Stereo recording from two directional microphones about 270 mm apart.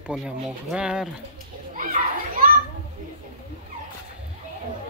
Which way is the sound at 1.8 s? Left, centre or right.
Right.